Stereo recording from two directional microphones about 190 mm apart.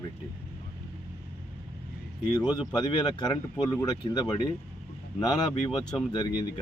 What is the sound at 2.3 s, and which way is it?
Speech, 20° left (ahead or behind).